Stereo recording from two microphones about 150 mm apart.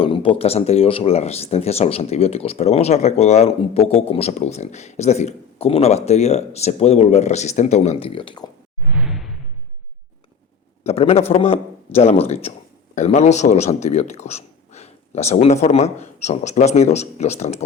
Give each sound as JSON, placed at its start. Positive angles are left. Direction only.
{"t": 0.0, "sound": "speech", "side_deg": 35}
{"t": 8.9, "sound": "whoosh", "side_deg": -5}
{"t": 10.8, "sound": "a man's voice", "side_deg": 40}